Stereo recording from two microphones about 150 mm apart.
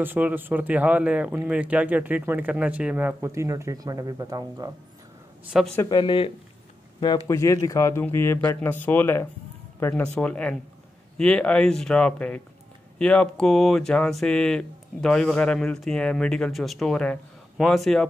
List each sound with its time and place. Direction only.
0.0 s speech: 10° right (ahead or behind)
5.4 s a man's voice: 5° right (ahead or behind)
5.8 s speech: 25° left (ahead or behind)
7.2 s speech: 20° left (ahead or behind); by 18.0 s centre (ahead or behind)